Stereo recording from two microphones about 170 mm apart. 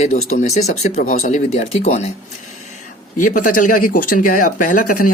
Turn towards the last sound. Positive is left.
turn(degrees=50)  # may be behind; listen again after turning